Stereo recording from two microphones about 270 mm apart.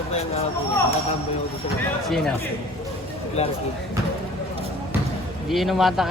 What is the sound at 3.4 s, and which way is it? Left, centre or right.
Speech, left.